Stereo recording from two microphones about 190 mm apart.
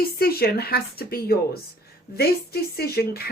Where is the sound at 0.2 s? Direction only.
55° left (ahead or behind).